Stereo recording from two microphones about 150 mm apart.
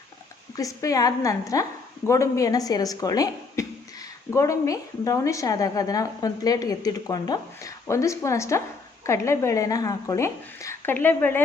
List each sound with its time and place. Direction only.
0.5 s a woman's voice: 20° left (ahead or behind)